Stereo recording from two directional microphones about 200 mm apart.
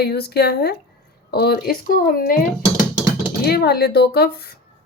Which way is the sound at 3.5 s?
50° left (ahead or behind).